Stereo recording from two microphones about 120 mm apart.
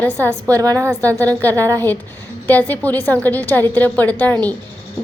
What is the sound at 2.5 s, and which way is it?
A woman's voice, 15° left (ahead or behind).